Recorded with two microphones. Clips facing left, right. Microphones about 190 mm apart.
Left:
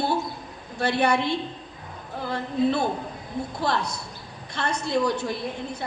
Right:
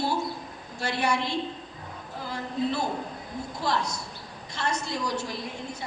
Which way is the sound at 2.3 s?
60° left (ahead or behind).